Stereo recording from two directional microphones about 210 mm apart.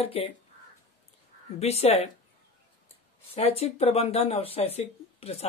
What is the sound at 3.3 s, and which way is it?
Speech, 30° left (ahead or behind).